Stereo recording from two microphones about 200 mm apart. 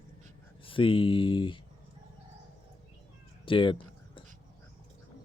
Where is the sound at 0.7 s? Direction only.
25° left (ahead or behind).